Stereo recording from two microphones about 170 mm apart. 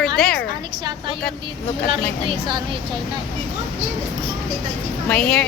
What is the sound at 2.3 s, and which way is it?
Speech, 25° right (ahead or behind).